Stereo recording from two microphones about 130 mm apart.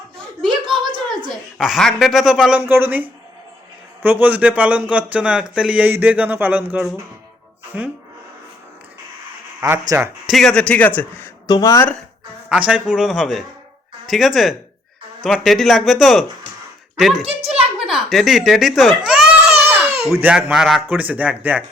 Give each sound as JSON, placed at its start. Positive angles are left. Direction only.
{"t": 0.2, "sound": "a sound", "side_deg": -40}
{"t": 1.3, "sound": "a woman's voice", "side_deg": 0}
{"t": 9.6, "sound": "speech", "side_deg": -20}
{"t": 10.2, "sound": "a man's voice", "side_deg": 0}
{"t": 11.4, "sound": "speech", "side_deg": 25}
{"t": 12.5, "sound": "a woman's voice", "side_deg": -10}
{"t": 17.2, "sound": "a sound", "side_deg": -50}
{"t": 17.7, "sound": "a child's voice", "side_deg": 0}